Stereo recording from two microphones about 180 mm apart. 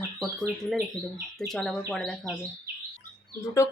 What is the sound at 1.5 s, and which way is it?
Speech, centre (ahead or behind).